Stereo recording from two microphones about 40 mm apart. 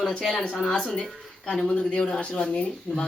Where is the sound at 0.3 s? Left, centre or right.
Left.